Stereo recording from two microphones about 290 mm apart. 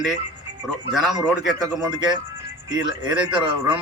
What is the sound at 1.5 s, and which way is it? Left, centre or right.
Speech, centre.